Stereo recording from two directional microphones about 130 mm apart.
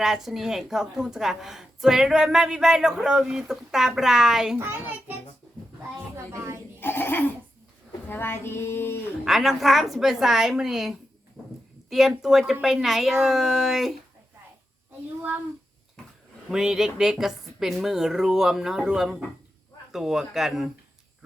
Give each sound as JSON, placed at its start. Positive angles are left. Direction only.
{"t": 0.0, "sound": "a woman's voice", "side_deg": -5}
{"t": 4.5, "sound": "a child's voice", "side_deg": -15}
{"t": 6.3, "sound": "speech", "side_deg": -20}
{"t": 6.7, "sound": "a sound", "side_deg": 15}
{"t": 8.0, "sound": "speech", "side_deg": 15}
{"t": 9.2, "sound": "a woman's voice", "side_deg": 0}
{"t": 11.4, "sound": "livestock", "side_deg": 0}
{"t": 11.9, "sound": "a woman's voice", "side_deg": 0}
{"t": 16.5, "sound": "a woman's voice", "side_deg": -5}